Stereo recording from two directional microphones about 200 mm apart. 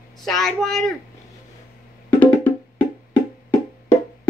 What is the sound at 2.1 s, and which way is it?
Music, 10° left (ahead or behind).